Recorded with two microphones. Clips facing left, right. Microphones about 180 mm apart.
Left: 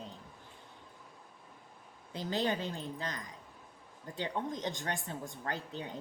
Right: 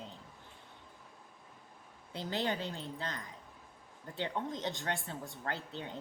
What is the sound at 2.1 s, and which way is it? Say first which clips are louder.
A woman's voice: left 2 dB; 15° left (ahead or behind).